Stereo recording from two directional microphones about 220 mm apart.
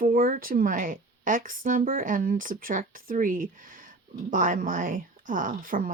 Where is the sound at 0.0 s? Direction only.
40° right (ahead or behind).